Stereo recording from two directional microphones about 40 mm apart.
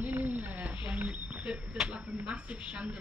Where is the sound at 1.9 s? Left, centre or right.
Right.